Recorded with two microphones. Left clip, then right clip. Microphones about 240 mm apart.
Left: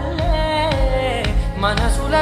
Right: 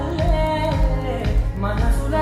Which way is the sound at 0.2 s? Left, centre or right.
Centre.